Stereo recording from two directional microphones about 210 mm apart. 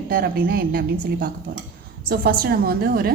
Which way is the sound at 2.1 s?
45° right (ahead or behind).